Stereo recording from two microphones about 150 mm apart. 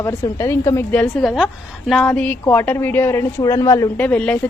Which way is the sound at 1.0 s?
Centre (ahead or behind).